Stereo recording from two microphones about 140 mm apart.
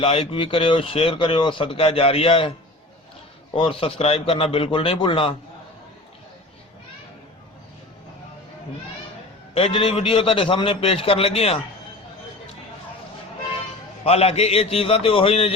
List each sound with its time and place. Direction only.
0.0 s speech: 45° left (ahead or behind)
3.5 s speech: 40° left (ahead or behind)
9.6 s a man's voice: 40° left (ahead or behind)
14.0 s a man's voice: 45° left (ahead or behind)